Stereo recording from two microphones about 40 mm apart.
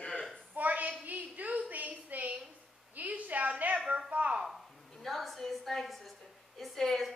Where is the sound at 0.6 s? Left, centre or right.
Right.